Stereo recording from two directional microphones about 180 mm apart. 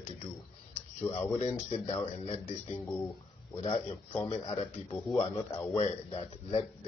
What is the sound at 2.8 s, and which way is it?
Speech, 15° left (ahead or behind).